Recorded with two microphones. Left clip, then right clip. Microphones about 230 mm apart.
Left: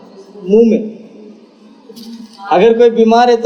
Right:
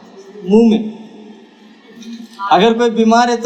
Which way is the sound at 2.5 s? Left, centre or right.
Right.